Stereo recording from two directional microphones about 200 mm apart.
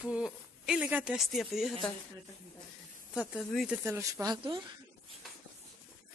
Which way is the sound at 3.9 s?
15° right (ahead or behind).